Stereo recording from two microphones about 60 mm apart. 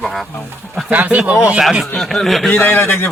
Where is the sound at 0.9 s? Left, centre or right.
Right.